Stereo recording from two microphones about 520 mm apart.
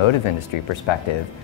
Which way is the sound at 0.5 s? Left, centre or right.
Left.